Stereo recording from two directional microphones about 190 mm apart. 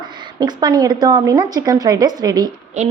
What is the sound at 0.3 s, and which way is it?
A woman's voice, 20° right (ahead or behind).